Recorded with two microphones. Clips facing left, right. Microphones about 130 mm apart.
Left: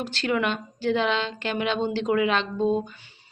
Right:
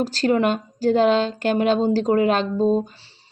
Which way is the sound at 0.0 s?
40° right (ahead or behind).